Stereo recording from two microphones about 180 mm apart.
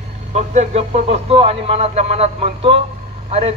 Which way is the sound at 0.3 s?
40° right (ahead or behind).